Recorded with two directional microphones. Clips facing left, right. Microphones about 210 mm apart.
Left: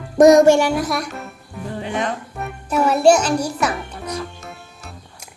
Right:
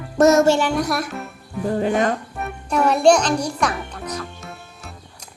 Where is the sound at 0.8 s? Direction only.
Centre (ahead or behind).